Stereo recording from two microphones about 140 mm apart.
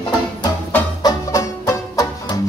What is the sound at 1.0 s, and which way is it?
Music, 20° left (ahead or behind).